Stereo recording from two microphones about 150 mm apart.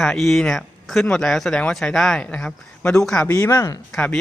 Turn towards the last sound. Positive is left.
turn(degrees=5)  # may be behind; listen again after turning